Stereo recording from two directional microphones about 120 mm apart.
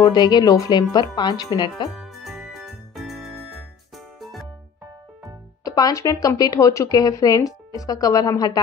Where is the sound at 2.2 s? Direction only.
Centre (ahead or behind).